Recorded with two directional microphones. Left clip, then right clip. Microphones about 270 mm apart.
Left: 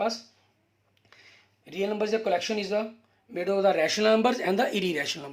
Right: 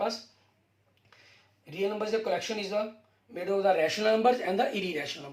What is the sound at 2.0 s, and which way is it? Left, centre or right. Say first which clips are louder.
Speech: left 6 dB; left.